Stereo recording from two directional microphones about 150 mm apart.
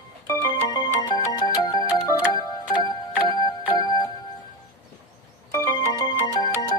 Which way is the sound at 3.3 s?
25° left (ahead or behind).